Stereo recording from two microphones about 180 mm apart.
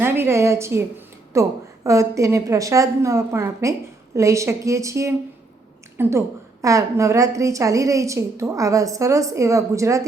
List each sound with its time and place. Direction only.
0.0 s a woman's voice: 15° right (ahead or behind)